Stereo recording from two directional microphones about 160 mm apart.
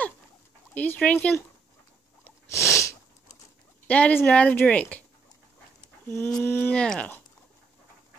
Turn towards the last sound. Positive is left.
turn(degrees=5)  # may be behind; listen again after turning